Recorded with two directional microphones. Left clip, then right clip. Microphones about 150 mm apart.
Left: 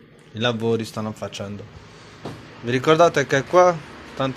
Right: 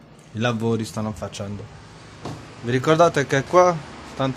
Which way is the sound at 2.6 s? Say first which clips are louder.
Left 1 dB; 15° right (ahead or behind).